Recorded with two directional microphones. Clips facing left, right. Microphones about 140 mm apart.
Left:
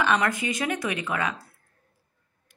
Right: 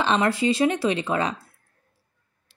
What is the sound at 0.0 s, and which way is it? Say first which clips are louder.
Speech: right 3 dB; 25° right (ahead or behind).